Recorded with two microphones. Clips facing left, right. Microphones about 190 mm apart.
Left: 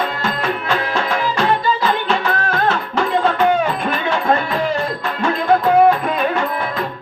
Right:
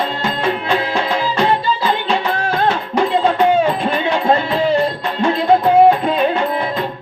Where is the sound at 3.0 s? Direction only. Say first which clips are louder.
Right 1 dB; 25° right (ahead or behind).